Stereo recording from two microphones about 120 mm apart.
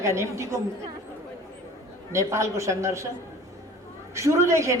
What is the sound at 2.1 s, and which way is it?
Speech, 25° right (ahead or behind).